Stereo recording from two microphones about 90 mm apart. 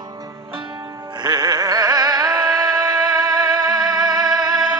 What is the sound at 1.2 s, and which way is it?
Music, 45° right (ahead or behind).